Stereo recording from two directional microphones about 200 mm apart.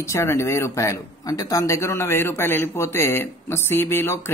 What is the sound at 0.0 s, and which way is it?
Speech, 15° left (ahead or behind).